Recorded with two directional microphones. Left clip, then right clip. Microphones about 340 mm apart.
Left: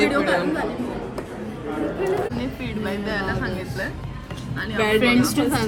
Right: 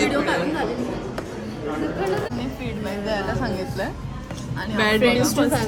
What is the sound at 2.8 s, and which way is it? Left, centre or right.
Speech, centre.